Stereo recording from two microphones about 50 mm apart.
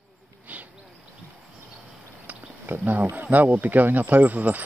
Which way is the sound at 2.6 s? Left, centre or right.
Right.